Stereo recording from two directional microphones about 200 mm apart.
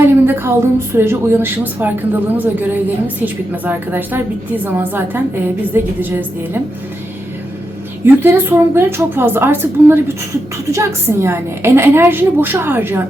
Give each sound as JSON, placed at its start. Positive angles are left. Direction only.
{"t": 0.0, "sound": "a woman's voice", "side_deg": -10}
{"t": 8.0, "sound": "a woman's voice", "side_deg": -10}